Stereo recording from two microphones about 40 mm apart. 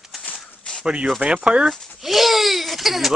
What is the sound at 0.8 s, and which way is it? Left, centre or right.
Speech, right.